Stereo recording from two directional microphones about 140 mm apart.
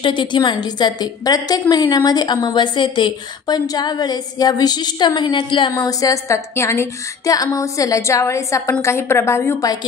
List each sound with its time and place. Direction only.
0.0 s a woman's voice: 35° left (ahead or behind)